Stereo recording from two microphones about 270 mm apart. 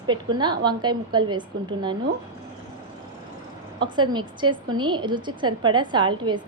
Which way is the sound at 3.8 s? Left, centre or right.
Centre.